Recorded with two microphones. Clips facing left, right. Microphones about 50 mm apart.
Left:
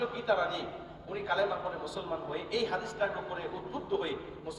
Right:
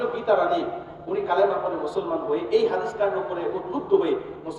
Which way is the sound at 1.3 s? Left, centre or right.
Right.